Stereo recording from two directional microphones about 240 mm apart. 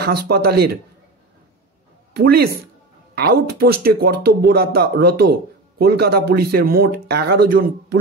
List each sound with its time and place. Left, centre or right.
0.0 s speech: right
2.1 s speech: right